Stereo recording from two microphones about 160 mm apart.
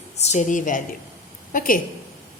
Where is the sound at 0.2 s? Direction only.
45° left (ahead or behind).